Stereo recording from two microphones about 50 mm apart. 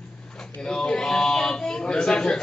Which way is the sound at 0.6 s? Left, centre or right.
Centre.